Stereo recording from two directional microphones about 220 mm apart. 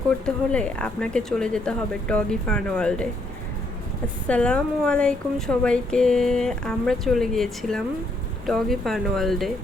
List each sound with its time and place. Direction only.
0.3 s a woman's voice: 5° left (ahead or behind)
4.3 s a woman's voice: 5° left (ahead or behind)